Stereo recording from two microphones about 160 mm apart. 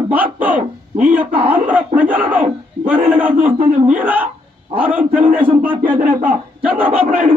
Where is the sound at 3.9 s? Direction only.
10° right (ahead or behind).